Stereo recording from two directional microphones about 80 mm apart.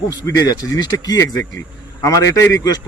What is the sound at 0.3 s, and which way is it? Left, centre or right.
A man's voice, left.